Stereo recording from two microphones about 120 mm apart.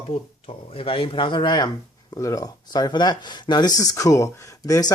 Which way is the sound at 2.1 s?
25° left (ahead or behind).